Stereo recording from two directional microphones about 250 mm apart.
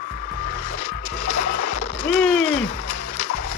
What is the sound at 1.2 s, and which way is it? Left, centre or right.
Music, left.